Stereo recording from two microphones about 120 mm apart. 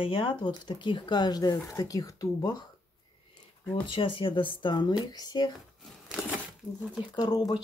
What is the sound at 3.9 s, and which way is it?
Speech, 45° left (ahead or behind).